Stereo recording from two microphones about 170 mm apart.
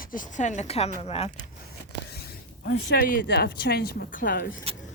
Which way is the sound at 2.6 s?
80° left.